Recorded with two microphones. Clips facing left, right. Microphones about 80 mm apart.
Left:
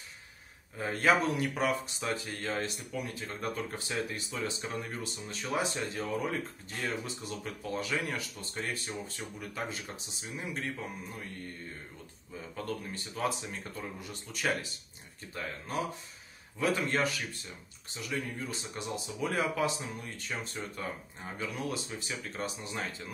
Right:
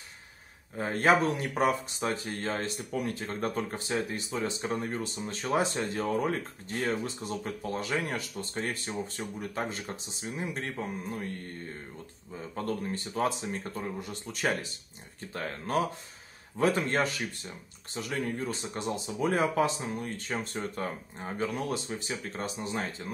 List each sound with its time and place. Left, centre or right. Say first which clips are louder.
0.7 s speech: right 3 dB; right
12.5 s speech: right 5 dB; right
15.3 s speech: right 6 dB; right
16.6 s speech: right 3 dB; right
18.0 s speech: right 6 dB; right
18.4 s speech: right 5 dB; right